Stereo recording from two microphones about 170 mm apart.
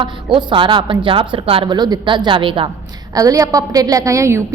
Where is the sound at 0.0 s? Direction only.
30° right (ahead or behind).